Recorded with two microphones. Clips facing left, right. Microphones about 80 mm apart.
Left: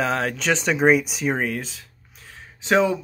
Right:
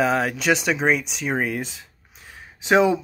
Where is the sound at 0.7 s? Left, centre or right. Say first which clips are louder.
Left 3 dB; centre.